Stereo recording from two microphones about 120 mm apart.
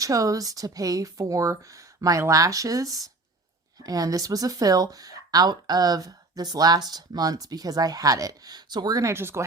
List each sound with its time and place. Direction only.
0.0 s speech: 30° right (ahead or behind)